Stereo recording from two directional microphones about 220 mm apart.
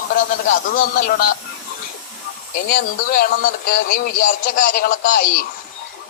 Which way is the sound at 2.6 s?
40° left (ahead or behind).